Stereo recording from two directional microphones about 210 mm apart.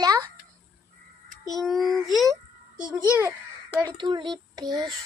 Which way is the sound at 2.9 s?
20° right (ahead or behind).